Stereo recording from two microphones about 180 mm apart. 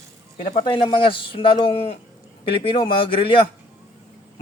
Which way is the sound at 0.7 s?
30° left (ahead or behind).